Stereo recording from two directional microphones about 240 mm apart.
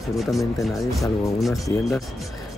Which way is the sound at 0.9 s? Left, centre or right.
Centre.